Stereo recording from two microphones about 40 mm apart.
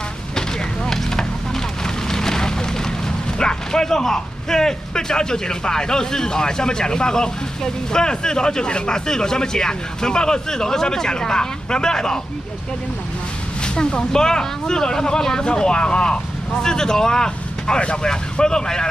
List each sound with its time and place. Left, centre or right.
2.0 s fire: centre
3.3 s speech: centre
13.7 s speech: centre